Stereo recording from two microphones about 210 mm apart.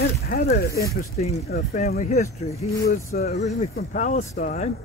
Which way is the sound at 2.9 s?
45° left (ahead or behind).